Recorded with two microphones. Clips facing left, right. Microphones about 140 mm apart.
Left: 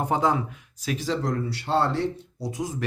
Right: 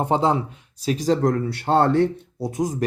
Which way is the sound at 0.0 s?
25° right (ahead or behind).